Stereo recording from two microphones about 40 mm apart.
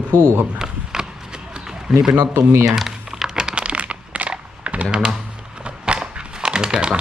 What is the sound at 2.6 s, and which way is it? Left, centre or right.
Crumpling, centre.